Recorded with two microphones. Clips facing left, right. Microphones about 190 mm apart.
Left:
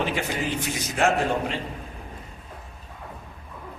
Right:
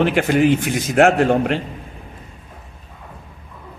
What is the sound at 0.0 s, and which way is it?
A man's voice, 65° right (ahead or behind).